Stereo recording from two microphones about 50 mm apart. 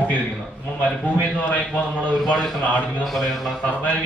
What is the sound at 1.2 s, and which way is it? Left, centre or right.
A man's voice, left.